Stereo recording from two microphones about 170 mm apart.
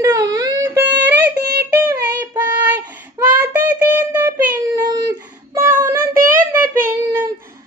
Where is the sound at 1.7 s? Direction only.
15° right (ahead or behind).